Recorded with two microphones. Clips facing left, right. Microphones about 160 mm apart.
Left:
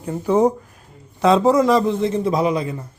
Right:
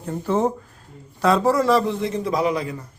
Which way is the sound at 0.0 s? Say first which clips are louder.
Left 5 dB; 10° left (ahead or behind).